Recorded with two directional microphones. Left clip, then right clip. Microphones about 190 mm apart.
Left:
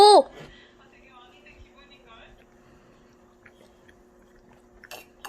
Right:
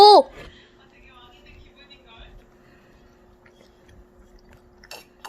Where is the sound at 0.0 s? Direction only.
Centre (ahead or behind).